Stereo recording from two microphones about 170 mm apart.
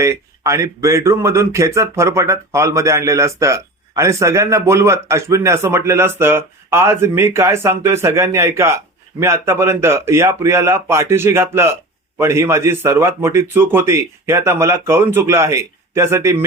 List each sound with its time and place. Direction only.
0.0 s speech: 15° right (ahead or behind)